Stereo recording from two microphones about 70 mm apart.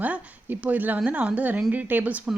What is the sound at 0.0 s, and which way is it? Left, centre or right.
A woman's voice, right.